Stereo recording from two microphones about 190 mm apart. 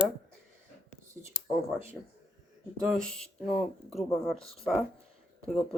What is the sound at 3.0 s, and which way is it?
Speech, 5° left (ahead or behind).